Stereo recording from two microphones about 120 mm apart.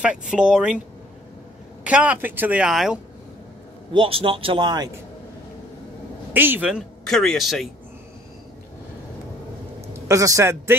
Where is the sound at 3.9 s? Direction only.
45° right (ahead or behind).